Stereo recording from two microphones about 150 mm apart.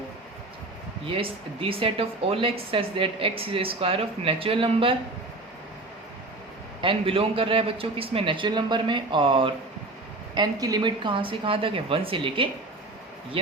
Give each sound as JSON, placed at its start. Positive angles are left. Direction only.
{"t": 1.0, "sound": "speech", "side_deg": -35}
{"t": 6.8, "sound": "speech", "side_deg": -40}